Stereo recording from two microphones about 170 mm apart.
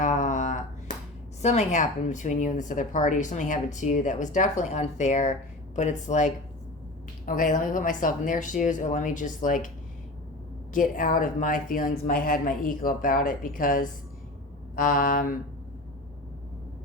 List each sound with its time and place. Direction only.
0.0 s a sound: 50° left (ahead or behind)
1.4 s speech: 40° left (ahead or behind)
10.8 s speech: 50° left (ahead or behind)